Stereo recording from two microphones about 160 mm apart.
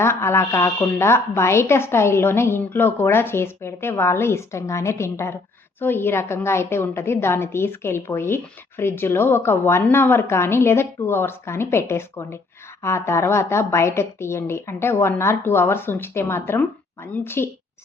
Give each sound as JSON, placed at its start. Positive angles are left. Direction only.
{"t": 0.0, "sound": "a woman's voice", "side_deg": 15}